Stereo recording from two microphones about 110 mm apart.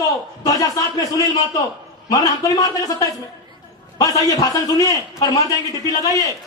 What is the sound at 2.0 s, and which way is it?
A man's voice, 30° left (ahead or behind).